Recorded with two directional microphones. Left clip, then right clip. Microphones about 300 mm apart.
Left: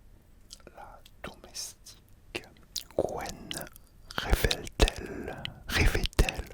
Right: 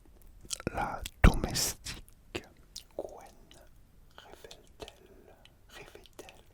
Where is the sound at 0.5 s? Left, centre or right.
Right.